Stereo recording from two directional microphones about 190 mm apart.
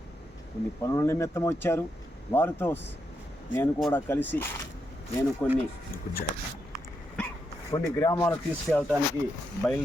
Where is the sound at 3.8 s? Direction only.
10° left (ahead or behind).